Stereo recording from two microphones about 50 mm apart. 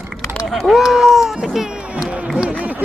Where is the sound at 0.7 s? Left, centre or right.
Centre.